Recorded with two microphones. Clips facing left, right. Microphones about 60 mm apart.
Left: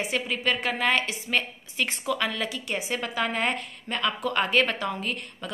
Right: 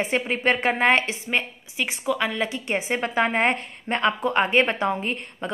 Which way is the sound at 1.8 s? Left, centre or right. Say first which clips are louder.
Right 3 dB; centre.